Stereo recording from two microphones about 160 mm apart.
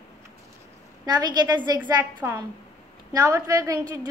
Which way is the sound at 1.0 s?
25° right (ahead or behind).